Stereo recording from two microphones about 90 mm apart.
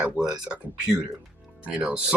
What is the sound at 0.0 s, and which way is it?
Speech, 10° right (ahead or behind).